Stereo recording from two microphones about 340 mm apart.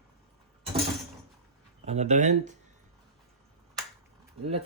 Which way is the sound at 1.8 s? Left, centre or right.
Centre.